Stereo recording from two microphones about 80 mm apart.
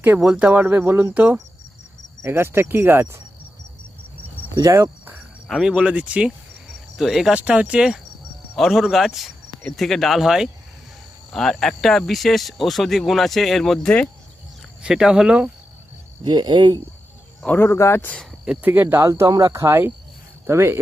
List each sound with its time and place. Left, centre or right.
0.0 s speech: right
0.3 s speech: centre
4.5 s speech: right
5.6 s speech: centre
6.9 s speech: centre
7.3 s speech: centre
8.5 s speech: centre
11.3 s speech: centre
14.8 s speech: centre
16.2 s speech: right
17.4 s speech: left
17.7 s speech: left
18.6 s speech: right
19.0 s speech: right